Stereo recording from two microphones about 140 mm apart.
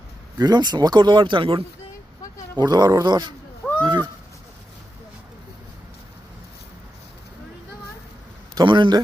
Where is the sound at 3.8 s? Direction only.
35° right (ahead or behind).